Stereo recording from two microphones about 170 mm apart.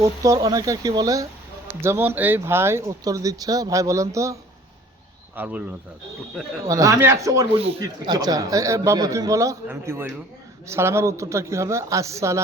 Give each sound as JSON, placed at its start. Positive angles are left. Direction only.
{"t": 0.0, "sound": "speech", "side_deg": -20}
{"t": 5.4, "sound": "speech", "side_deg": -10}
{"t": 6.7, "sound": "speech", "side_deg": -20}
{"t": 7.5, "sound": "speech", "side_deg": -35}
{"t": 7.8, "sound": "speech", "side_deg": -25}